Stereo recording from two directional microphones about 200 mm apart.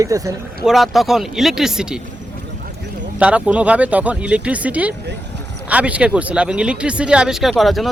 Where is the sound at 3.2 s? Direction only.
5° right (ahead or behind).